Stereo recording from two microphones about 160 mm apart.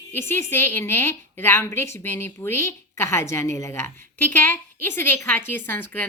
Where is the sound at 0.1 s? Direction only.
15° left (ahead or behind).